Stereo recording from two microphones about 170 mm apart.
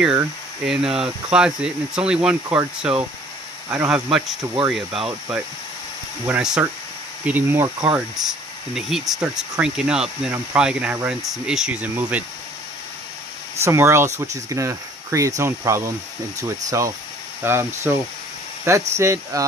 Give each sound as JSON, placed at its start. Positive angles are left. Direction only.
{"t": 0.7, "sound": "speech", "side_deg": -5}
{"t": 7.9, "sound": "speech", "side_deg": -5}
{"t": 13.7, "sound": "speech", "side_deg": -15}